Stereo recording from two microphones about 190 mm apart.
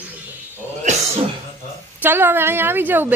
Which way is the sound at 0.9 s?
40° right (ahead or behind).